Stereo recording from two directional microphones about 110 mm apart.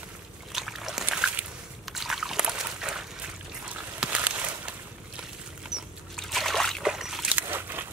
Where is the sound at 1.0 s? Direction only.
15° right (ahead or behind).